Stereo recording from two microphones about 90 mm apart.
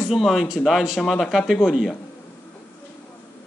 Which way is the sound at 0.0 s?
Centre (ahead or behind).